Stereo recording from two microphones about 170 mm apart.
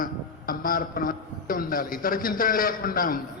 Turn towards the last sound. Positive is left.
turn(degrees=55)  # may be behind; listen again after turning